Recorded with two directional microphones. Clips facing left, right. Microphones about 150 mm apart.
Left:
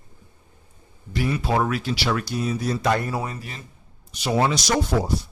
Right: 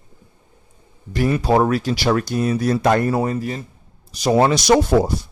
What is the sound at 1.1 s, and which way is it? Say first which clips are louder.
A man's voice: right 6 dB; 45° right (ahead or behind).